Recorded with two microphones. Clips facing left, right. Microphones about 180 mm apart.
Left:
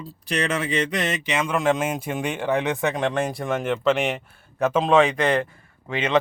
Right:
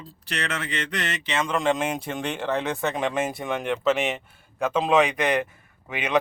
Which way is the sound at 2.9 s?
Centre (ahead or behind).